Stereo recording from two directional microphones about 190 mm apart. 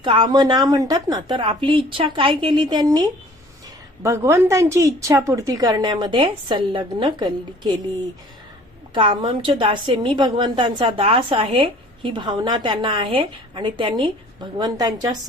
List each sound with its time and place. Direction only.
0.0 s a woman's voice: 25° right (ahead or behind)
9.0 s a woman's voice: 25° right (ahead or behind)